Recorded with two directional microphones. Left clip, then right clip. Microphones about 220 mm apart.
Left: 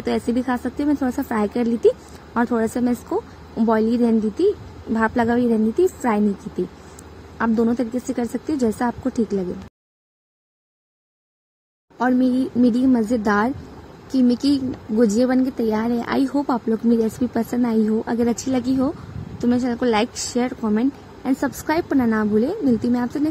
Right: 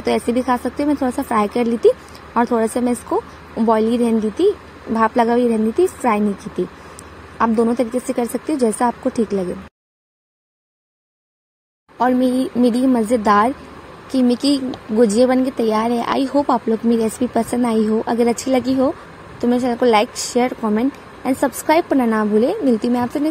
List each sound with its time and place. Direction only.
0.0 s a woman's voice: 10° right (ahead or behind)
7.3 s a woman's voice: 10° right (ahead or behind)
12.7 s a woman's voice: 15° right (ahead or behind)